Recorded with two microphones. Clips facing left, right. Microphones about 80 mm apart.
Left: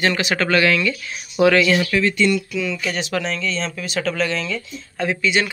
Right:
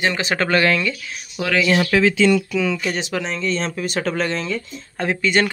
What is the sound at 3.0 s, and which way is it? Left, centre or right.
Speech, right.